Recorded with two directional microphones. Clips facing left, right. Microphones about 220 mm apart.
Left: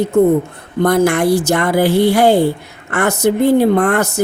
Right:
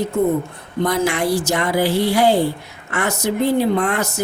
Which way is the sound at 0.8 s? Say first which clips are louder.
Left 6 dB; 55° left (ahead or behind).